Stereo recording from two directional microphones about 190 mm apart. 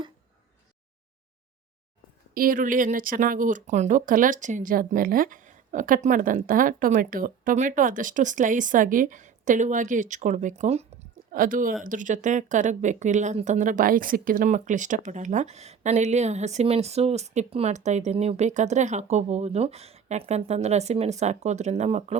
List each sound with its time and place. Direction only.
2.3 s speech: 50° right (ahead or behind)
11.3 s speech: 45° right (ahead or behind)